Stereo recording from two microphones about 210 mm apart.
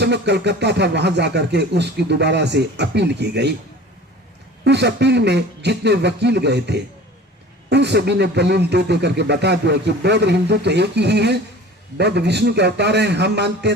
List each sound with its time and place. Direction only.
0.0 s speech: 55° right (ahead or behind)
4.6 s speech: 55° right (ahead or behind)